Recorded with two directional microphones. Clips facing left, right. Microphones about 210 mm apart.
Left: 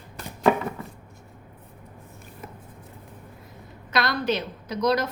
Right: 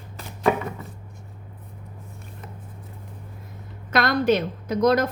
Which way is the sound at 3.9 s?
50° right (ahead or behind).